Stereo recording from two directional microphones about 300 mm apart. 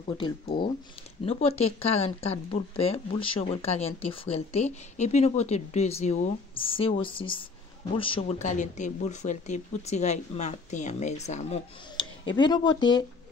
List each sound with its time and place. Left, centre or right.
0.0 s speech: centre